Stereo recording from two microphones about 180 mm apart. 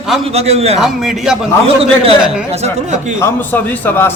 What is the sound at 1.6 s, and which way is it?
Speech, 30° right (ahead or behind).